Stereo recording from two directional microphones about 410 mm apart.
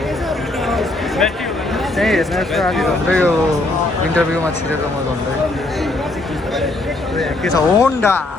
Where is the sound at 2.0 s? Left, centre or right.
Centre.